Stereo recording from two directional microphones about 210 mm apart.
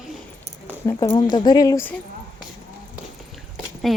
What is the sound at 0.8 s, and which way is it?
Speech, 15° left (ahead or behind).